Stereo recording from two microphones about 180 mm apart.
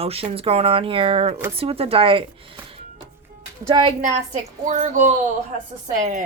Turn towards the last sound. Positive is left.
turn(degrees=-45)  # may be behind; listen again after turning